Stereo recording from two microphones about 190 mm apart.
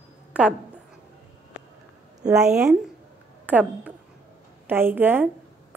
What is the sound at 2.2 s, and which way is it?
A woman's voice, 5° right (ahead or behind).